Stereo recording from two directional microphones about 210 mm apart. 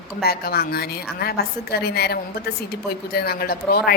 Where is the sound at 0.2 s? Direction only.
45° left (ahead or behind).